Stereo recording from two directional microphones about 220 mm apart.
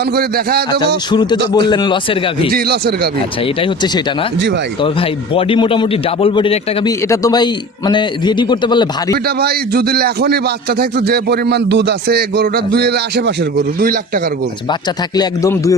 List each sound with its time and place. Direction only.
0.0 s a man's voice: 45° right (ahead or behind)
1.1 s a man's voice: 20° left (ahead or behind)
2.5 s a man's voice: 45° right (ahead or behind)
3.4 s a man's voice: 25° left (ahead or behind)
4.4 s a man's voice: 55° right (ahead or behind)
4.8 s a man's voice: 25° left (ahead or behind)
9.1 s a man's voice: 45° right (ahead or behind)
14.7 s speech: 20° left (ahead or behind)